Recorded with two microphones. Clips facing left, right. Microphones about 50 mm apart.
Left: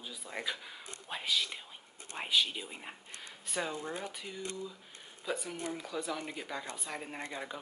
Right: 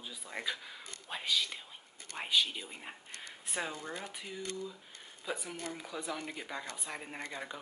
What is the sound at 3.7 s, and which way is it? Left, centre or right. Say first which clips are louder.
Speech: left 3 dB; centre.